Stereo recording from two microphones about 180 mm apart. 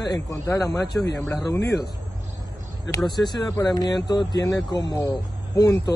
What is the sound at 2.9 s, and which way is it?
Speech, 25° left (ahead or behind).